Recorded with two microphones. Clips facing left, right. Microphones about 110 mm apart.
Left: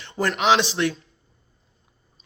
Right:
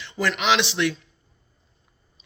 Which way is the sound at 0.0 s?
45° left (ahead or behind).